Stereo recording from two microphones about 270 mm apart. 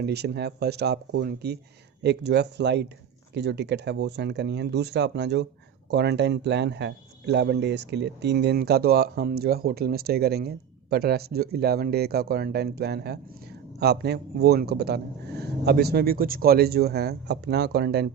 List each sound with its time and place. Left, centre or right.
0.0 s speech: right